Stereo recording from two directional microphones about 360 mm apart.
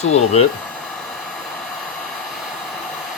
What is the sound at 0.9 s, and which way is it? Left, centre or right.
Hair dryer, centre.